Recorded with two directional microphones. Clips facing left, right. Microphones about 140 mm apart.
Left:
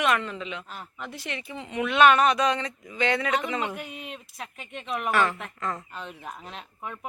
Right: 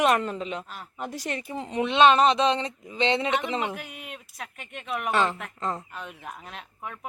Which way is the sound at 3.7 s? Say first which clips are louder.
Left 2 dB; centre (ahead or behind).